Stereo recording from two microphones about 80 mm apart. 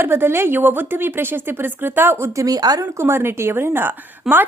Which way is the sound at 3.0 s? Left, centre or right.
Right.